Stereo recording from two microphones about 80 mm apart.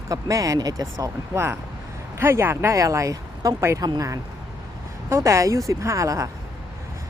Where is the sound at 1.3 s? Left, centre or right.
Right.